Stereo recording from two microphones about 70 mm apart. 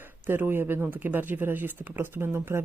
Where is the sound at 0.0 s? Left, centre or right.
Right.